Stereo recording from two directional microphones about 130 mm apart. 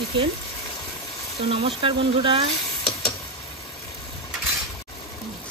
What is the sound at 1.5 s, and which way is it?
Speech, 45° right (ahead or behind).